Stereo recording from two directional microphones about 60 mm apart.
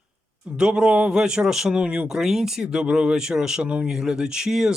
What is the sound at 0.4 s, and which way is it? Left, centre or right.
Speech, centre.